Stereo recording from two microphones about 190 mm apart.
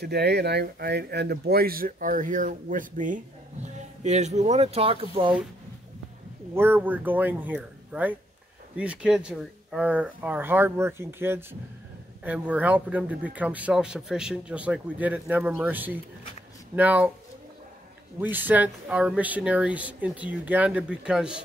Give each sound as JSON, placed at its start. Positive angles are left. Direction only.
{"t": 0.0, "sound": "speech", "side_deg": -60}
{"t": 6.5, "sound": "speech", "side_deg": -10}
{"t": 18.2, "sound": "speech", "side_deg": -10}